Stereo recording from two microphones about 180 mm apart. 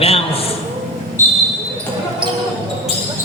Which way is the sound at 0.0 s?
35° left (ahead or behind).